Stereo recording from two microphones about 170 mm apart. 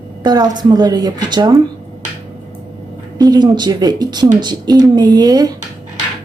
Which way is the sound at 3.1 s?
25° right (ahead or behind).